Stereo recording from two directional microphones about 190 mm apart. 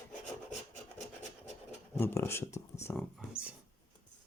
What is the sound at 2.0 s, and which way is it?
Speech, 15° left (ahead or behind).